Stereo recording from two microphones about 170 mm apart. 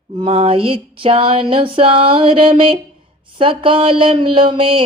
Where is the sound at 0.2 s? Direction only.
35° right (ahead or behind).